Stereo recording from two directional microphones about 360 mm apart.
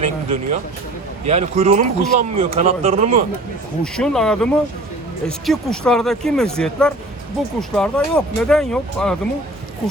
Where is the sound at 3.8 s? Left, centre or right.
Centre.